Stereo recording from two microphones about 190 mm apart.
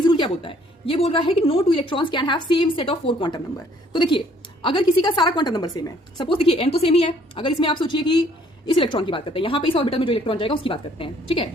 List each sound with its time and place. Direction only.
0.0 s a woman's voice: 25° left (ahead or behind)